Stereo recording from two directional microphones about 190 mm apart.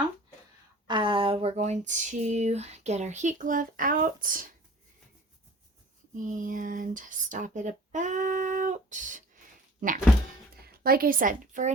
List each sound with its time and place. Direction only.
0.9 s speech: 25° right (ahead or behind); by 4.4 s 45° right (ahead or behind)
6.2 s speech: 45° right (ahead or behind)
10.6 s a woman's voice: 50° right (ahead or behind)